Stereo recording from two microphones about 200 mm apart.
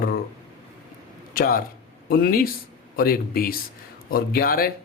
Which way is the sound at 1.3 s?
45° left (ahead or behind).